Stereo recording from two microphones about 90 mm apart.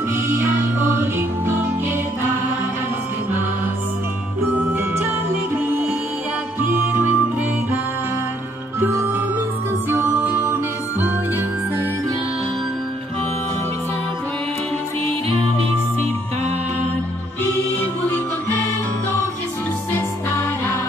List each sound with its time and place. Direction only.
4.6 s music: 25° right (ahead or behind)
6.6 s music: 20° right (ahead or behind)
8.7 s music: 25° right (ahead or behind)